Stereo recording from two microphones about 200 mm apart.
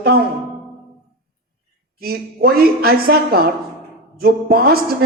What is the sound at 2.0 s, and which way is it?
Speech, 50° right (ahead or behind).